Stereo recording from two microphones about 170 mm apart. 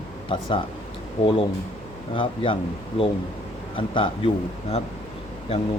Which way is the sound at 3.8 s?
30° left (ahead or behind).